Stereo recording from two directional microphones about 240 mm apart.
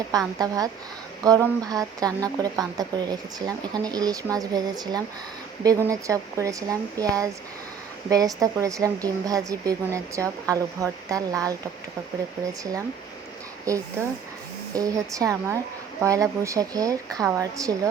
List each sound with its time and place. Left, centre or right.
0.3 s a woman's voice: centre
13.7 s a woman's voice: centre